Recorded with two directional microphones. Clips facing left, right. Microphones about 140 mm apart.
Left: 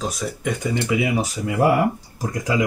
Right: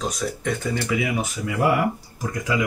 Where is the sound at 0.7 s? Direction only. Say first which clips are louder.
Left 6 dB; 20° left (ahead or behind).